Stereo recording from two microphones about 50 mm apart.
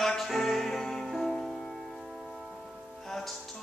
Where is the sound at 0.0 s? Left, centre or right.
Centre.